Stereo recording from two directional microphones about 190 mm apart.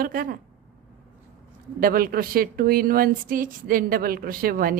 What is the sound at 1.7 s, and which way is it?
Speech, 50° right (ahead or behind).